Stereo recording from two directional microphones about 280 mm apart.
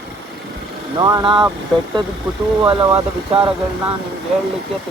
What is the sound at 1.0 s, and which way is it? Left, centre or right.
Speech, centre.